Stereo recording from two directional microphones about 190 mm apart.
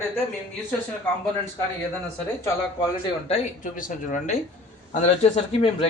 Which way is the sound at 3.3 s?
45° left (ahead or behind).